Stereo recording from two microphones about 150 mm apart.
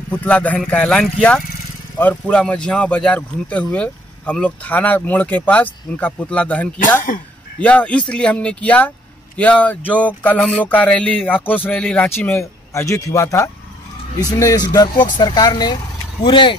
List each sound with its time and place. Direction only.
0.1 s speech: 10° left (ahead or behind)
6.8 s speech: 60° left (ahead or behind)
7.6 s speech: 10° left (ahead or behind); by 16.5 s 35° left (ahead or behind)